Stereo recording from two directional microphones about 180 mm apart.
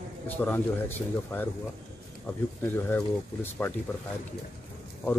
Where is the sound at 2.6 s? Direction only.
10° left (ahead or behind).